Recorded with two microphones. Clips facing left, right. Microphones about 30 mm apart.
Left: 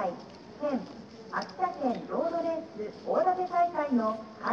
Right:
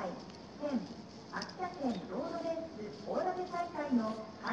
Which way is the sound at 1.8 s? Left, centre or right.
Left.